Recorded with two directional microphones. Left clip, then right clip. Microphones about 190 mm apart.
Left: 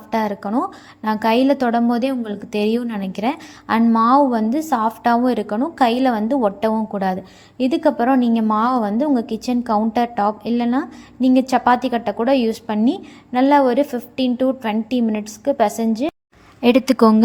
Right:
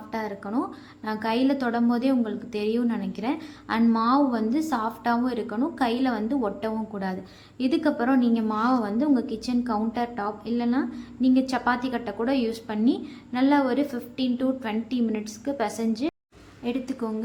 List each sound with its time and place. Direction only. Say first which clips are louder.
0.1 s a woman's voice: left 10 dB; 40° left (ahead or behind)
16.6 s a woman's voice: left 17 dB; 50° left (ahead or behind)